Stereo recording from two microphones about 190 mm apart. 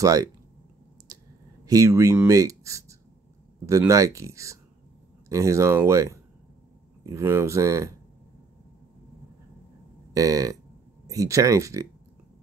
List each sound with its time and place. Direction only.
0.0 s speech: 20° right (ahead or behind)
1.1 s clicking: 20° right (ahead or behind)
1.7 s speech: 15° right (ahead or behind)
10.1 s speech: 15° right (ahead or behind)